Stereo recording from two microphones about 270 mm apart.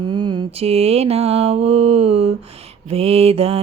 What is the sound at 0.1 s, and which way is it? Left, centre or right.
Music, centre.